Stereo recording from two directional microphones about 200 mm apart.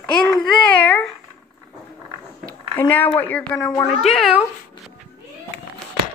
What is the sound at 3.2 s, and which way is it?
Speech, 5° left (ahead or behind).